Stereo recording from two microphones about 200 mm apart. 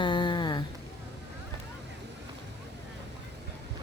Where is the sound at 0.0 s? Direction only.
25° left (ahead or behind).